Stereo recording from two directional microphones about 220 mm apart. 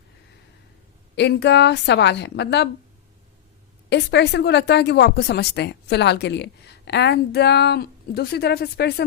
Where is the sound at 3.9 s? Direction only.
50° left (ahead or behind).